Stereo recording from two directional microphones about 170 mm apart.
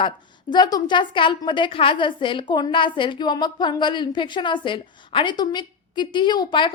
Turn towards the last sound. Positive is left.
turn(degrees=25)  # may be behind; listen again after turning